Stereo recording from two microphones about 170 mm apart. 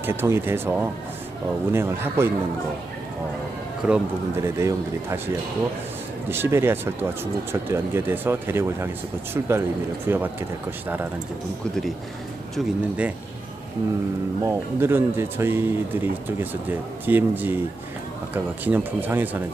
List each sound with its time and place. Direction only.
0.0 s speech: 15° right (ahead or behind)
3.8 s a man's voice: 5° right (ahead or behind)
4.4 s speech: 15° right (ahead or behind)
12.5 s speech: 10° right (ahead or behind)
14.4 s speech: 15° right (ahead or behind)